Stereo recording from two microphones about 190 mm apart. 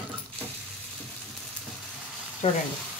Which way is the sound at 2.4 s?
30° left (ahead or behind).